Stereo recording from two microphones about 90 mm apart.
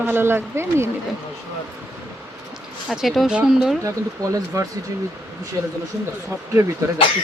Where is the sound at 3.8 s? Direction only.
35° right (ahead or behind).